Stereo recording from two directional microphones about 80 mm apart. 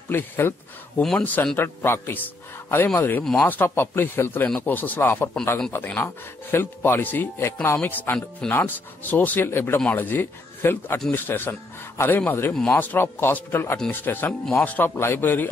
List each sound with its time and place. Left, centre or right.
0.1 s speech: left
1.6 s speech: left